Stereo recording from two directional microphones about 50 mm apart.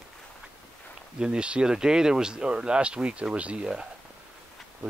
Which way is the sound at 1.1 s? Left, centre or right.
Centre.